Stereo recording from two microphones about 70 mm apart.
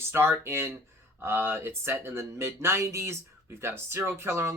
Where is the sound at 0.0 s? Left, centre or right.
Right.